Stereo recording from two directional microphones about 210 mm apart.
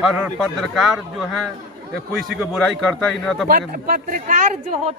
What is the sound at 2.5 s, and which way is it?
Speech, centre (ahead or behind).